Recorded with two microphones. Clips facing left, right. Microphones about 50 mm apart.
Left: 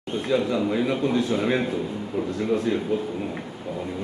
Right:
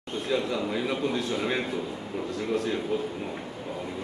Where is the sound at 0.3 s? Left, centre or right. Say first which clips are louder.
Left 5 dB; centre.